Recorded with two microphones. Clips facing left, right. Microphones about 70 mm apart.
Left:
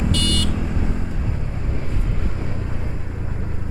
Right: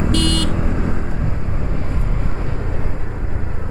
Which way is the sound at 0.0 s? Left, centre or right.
Right.